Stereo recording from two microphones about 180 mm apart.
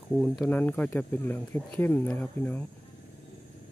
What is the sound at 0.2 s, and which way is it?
Speech, 5° left (ahead or behind).